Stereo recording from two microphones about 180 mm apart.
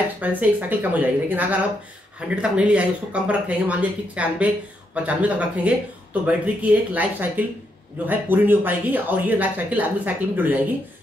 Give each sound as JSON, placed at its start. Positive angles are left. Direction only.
{"t": 0.2, "sound": "speech", "side_deg": -10}